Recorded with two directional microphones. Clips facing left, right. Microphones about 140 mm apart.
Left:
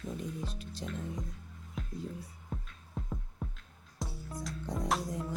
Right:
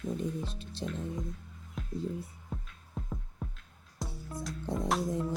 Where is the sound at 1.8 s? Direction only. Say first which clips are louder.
Right 5 dB; centre (ahead or behind).